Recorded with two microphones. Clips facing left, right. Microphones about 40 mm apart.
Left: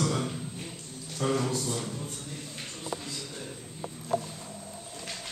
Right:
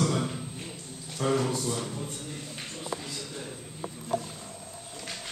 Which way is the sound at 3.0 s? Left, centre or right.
Centre.